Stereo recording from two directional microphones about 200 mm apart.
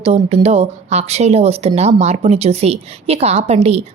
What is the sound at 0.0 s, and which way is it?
A woman's voice, 30° right (ahead or behind).